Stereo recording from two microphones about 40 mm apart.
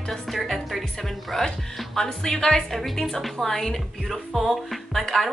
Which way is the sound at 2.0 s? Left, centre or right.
Centre.